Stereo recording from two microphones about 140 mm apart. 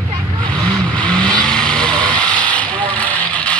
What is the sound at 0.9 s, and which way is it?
Vehicle, 5° left (ahead or behind).